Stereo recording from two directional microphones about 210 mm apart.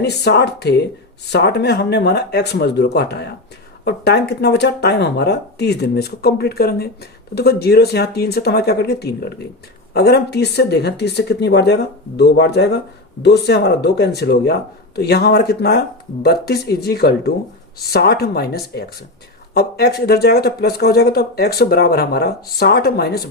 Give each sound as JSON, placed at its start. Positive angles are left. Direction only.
{"t": 0.0, "sound": "speech", "side_deg": 50}